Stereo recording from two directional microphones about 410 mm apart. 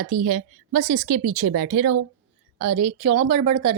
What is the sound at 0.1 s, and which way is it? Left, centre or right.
Speech, centre.